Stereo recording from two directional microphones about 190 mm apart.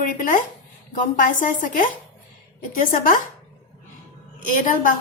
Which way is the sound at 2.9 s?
45° left (ahead or behind).